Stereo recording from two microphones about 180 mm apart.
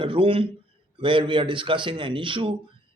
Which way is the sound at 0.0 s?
30° right (ahead or behind).